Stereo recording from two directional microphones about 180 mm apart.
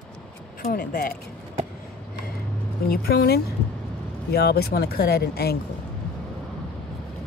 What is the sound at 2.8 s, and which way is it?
Speech, 60° left (ahead or behind).